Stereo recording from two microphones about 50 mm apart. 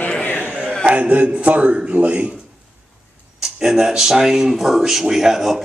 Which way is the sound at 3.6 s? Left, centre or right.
Centre.